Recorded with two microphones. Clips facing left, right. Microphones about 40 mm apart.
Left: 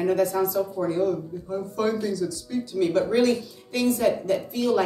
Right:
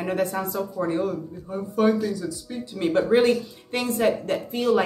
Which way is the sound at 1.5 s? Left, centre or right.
Centre.